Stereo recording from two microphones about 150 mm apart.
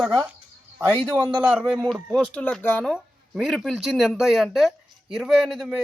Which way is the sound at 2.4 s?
10° left (ahead or behind).